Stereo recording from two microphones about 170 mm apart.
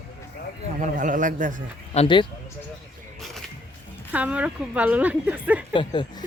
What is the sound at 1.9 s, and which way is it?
Speech, 35° left (ahead or behind).